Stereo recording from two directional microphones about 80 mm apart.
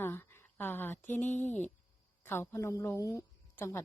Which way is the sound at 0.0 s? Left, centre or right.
Left.